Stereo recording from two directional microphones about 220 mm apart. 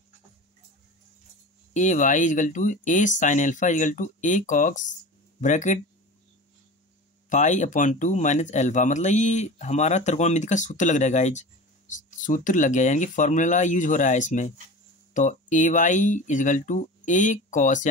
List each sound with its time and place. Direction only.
1.7 s speech: 35° left (ahead or behind)
7.2 s speech: 35° left (ahead or behind)